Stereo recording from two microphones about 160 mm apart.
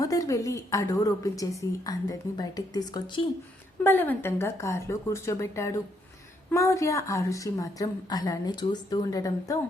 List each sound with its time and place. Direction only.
0.0 s a woman's voice: 20° left (ahead or behind)
3.8 s a woman's voice: 10° left (ahead or behind)